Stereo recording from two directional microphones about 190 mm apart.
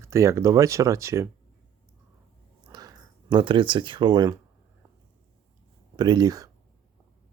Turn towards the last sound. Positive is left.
turn(degrees=-20)  # may be behind; listen again after turning